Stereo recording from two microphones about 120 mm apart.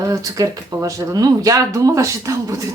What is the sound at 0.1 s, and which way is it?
Speech, 30° right (ahead or behind).